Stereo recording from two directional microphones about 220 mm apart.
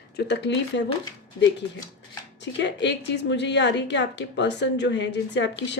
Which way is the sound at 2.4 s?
55° left (ahead or behind).